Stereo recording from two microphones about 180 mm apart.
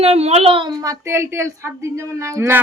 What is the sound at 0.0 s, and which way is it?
A woman's voice, 35° right (ahead or behind).